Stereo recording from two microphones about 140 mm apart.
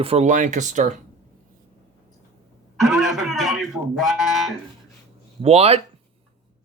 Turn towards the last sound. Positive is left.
turn(degrees=-45)  # may be behind; listen again after turning